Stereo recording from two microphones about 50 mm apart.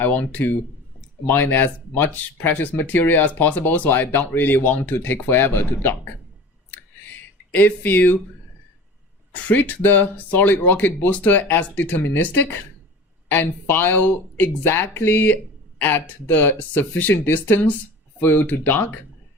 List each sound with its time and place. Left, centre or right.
0.0 s speech: left
7.1 s a sound: left
9.3 s speech: left